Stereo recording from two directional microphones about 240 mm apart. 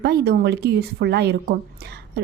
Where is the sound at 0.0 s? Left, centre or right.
Right.